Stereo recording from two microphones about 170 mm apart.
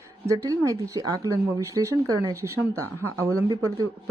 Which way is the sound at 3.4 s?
25° right (ahead or behind).